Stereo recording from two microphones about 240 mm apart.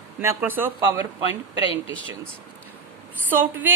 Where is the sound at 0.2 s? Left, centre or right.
Centre.